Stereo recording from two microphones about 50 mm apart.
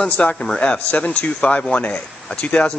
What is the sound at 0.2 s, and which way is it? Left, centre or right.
A man's voice, centre.